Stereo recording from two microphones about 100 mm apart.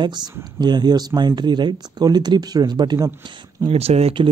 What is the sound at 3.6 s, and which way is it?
Speech, 90° right.